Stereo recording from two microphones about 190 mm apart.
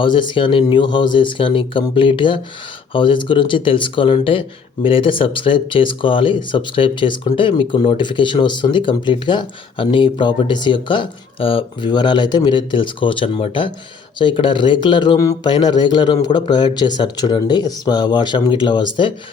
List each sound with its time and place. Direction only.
0.0 s speech: 25° left (ahead or behind)